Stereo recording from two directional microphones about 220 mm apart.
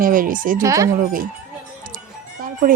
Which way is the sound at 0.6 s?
15° right (ahead or behind).